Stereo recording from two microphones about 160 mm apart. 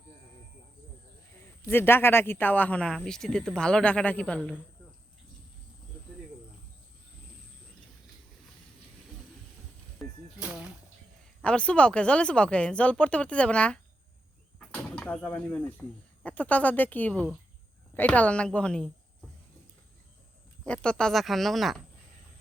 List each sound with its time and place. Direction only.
1.6 s speech: 15° left (ahead or behind)
10.0 s music: centre (ahead or behind)
10.4 s a sound: 5° right (ahead or behind)
11.4 s speech: 5° left (ahead or behind)
20.7 s speech: 5° left (ahead or behind)